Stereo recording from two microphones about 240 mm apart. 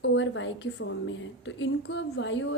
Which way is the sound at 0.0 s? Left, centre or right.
Left.